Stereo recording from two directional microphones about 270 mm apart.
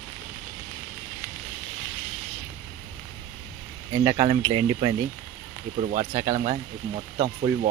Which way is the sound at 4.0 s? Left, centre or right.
Centre.